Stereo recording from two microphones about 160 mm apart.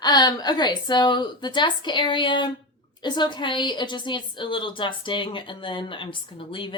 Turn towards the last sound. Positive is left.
turn(degrees=30)  # may be behind; listen again after turning